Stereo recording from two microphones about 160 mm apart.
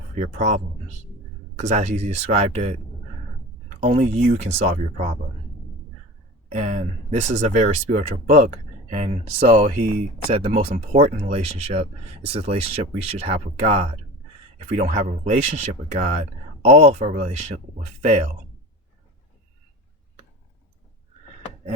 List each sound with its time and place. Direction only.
0.2 s speech: 50° right (ahead or behind)
3.8 s speech: 45° right (ahead or behind)
6.5 s speech: 45° right (ahead or behind)
14.8 s speech: 45° right (ahead or behind)